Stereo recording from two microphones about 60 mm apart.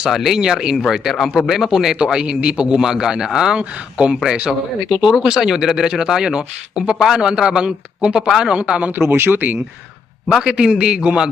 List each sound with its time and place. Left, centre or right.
0.0 s a man's voice: centre
8.9 s speech: right
10.3 s a man's voice: centre